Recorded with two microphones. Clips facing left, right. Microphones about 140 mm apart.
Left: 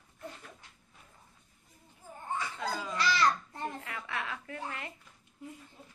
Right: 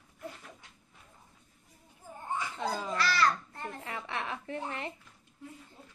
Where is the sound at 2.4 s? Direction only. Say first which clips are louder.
Right 2 dB; 25° right (ahead or behind).